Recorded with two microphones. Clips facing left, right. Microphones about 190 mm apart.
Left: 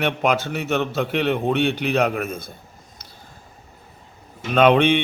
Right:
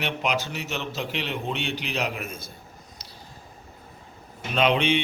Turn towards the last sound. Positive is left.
turn(degrees=55)  # may be behind; listen again after turning